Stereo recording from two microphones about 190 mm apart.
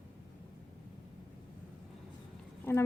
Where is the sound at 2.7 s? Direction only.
10° left (ahead or behind).